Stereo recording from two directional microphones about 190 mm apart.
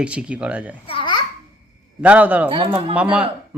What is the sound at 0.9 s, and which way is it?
Babbling, 25° left (ahead or behind).